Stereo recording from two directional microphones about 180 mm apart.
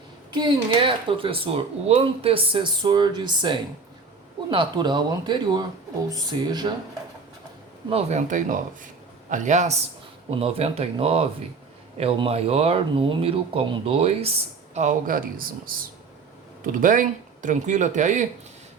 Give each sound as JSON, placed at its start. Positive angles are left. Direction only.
{"t": 0.3, "sound": "speech", "side_deg": -25}
{"t": 7.9, "sound": "speech", "side_deg": -35}
{"t": 16.8, "sound": "speech", "side_deg": -45}